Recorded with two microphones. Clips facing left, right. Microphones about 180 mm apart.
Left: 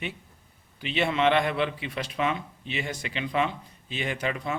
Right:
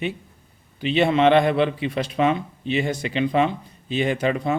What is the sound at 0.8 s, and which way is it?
A man's voice, 30° right (ahead or behind).